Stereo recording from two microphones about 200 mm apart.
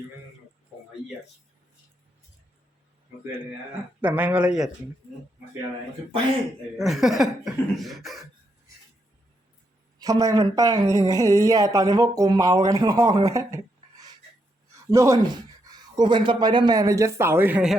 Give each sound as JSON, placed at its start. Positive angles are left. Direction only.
{"t": 4.0, "sound": "speech", "side_deg": -10}
{"t": 6.7, "sound": "speech", "side_deg": 0}
{"t": 10.0, "sound": "speech", "side_deg": -15}
{"t": 14.8, "sound": "speech", "side_deg": -15}